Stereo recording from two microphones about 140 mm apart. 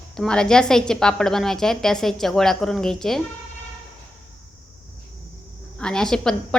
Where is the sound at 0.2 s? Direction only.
5° left (ahead or behind).